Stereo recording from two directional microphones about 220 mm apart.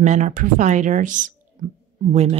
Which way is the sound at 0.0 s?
35° right (ahead or behind).